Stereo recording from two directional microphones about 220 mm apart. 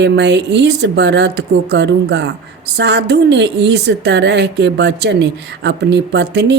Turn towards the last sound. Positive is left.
turn(degrees=-50)  # may be behind; listen again after turning